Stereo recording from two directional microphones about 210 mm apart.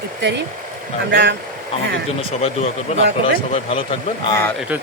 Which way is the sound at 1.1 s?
55° right (ahead or behind).